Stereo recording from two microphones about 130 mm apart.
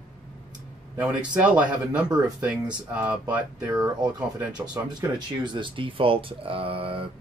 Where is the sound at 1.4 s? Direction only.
10° right (ahead or behind).